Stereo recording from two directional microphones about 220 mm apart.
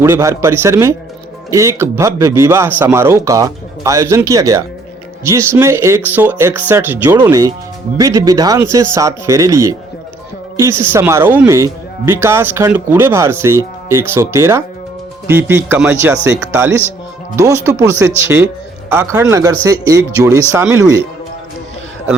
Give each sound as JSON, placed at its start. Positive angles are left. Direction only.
{"t": 0.0, "sound": "speech", "side_deg": -15}